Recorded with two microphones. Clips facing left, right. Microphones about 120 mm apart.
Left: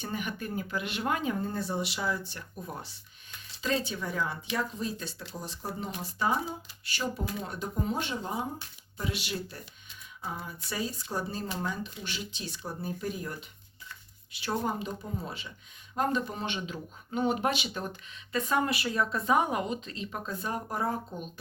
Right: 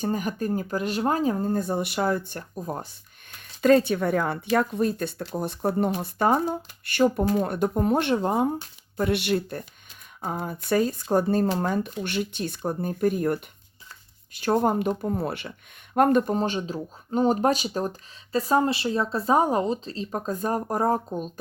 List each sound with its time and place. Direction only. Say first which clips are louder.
0.0 s speech: right 9 dB; 40° right (ahead or behind)
2.4 s speech: right 8 dB; 40° right (ahead or behind)
3.6 s speech: right 13 dB; 55° right (ahead or behind)
16.0 s speech: right 10 dB; 55° right (ahead or behind)